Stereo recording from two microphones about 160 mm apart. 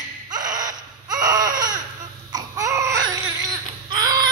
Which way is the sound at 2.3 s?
25° right (ahead or behind).